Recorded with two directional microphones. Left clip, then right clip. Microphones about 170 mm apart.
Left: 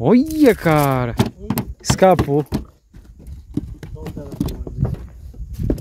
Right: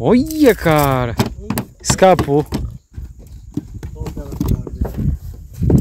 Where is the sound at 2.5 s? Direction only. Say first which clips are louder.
Right 1 dB; centre (ahead or behind).